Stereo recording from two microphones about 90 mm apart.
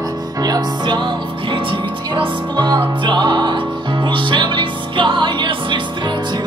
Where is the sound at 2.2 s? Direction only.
60° right (ahead or behind).